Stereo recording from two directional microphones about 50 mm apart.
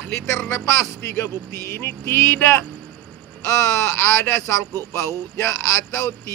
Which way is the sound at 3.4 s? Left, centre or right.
Left.